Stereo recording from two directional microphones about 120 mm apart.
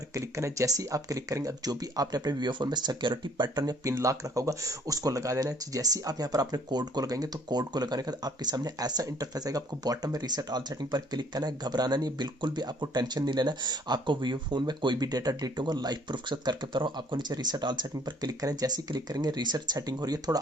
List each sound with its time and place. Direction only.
0.1 s speech: 25° right (ahead or behind)